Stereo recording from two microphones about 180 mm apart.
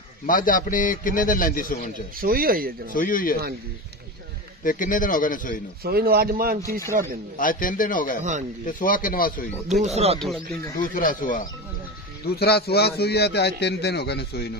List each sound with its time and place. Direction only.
0.3 s a man's voice: 50° left (ahead or behind)
2.1 s speech: 55° right (ahead or behind)
2.9 s a man's voice: 50° left (ahead or behind)
4.6 s a man's voice: 50° left (ahead or behind)
5.9 s a man's voice: 60° right (ahead or behind)
7.3 s a man's voice: 50° left (ahead or behind)
8.2 s speech: 40° right (ahead or behind)
8.6 s a man's voice: 50° left (ahead or behind)
9.8 s speech: 35° right (ahead or behind)
10.9 s a man's voice: 50° left (ahead or behind)
12.4 s a man's voice: 65° left (ahead or behind)